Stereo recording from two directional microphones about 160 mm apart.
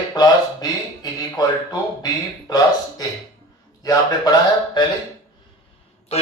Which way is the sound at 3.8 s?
25° left (ahead or behind).